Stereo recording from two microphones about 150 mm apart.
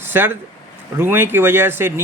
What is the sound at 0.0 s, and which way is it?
Speech, 15° right (ahead or behind).